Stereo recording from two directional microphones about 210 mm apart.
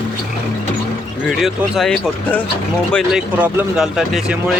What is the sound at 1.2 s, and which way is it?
Speech, centre (ahead or behind).